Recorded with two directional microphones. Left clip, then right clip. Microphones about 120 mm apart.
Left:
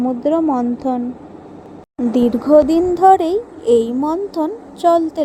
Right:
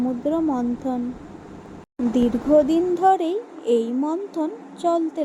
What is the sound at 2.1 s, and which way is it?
Child singing, 35° left (ahead or behind).